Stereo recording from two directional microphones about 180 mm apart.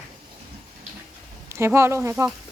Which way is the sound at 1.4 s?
15° right (ahead or behind).